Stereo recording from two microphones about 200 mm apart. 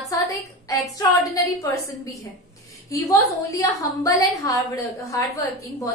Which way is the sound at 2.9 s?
15° left (ahead or behind).